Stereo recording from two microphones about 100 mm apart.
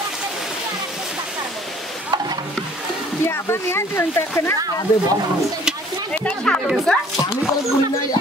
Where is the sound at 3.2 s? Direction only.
25° left (ahead or behind).